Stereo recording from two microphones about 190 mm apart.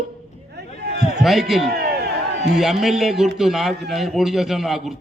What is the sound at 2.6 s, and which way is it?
A man's voice, centre (ahead or behind).